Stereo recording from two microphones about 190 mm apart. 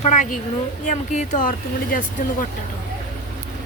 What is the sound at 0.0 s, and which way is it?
A woman's voice, 40° left (ahead or behind).